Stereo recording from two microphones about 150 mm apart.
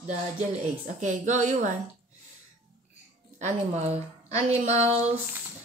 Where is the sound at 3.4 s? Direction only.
45° right (ahead or behind).